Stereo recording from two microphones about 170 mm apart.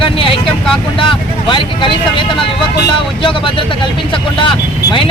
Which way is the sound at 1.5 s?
30° left (ahead or behind).